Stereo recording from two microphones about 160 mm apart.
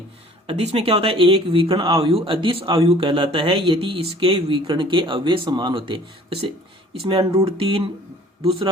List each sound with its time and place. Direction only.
0.4 s speech: 40° right (ahead or behind)